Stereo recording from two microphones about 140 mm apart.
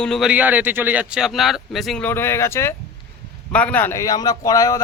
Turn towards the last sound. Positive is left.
turn(degrees=25)  # may be behind; listen again after turning